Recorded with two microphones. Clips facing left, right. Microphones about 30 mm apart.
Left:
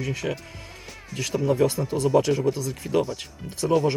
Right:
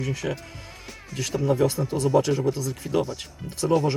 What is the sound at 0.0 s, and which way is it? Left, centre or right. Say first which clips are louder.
Speech: even; centre.